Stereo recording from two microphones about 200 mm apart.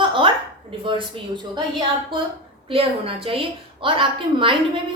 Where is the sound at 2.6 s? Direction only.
25° right (ahead or behind).